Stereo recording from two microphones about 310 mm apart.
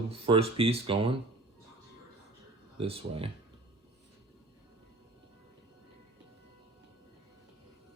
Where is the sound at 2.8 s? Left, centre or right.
Centre.